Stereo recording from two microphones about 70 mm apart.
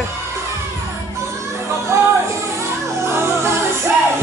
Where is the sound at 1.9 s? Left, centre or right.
Right.